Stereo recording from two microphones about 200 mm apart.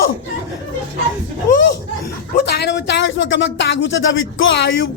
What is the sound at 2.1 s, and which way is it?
Speech, 55° left (ahead or behind).